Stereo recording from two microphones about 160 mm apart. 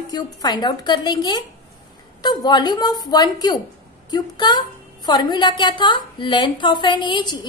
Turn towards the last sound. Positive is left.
turn(degrees=25)  # may be behind; listen again after turning